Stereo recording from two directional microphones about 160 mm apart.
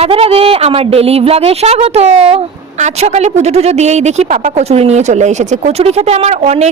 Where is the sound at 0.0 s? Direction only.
35° right (ahead or behind).